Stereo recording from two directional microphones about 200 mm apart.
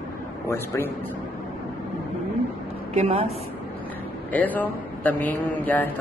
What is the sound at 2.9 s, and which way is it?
Speech, 30° right (ahead or behind).